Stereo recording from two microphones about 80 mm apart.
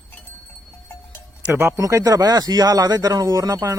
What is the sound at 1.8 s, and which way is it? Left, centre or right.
Speech, right.